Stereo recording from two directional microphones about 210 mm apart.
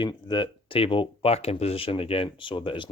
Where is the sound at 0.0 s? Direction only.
20° left (ahead or behind).